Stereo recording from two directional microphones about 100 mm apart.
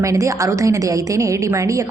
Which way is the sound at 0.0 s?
30° right (ahead or behind).